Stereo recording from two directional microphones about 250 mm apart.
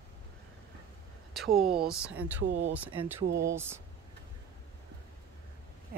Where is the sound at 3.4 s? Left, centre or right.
Centre.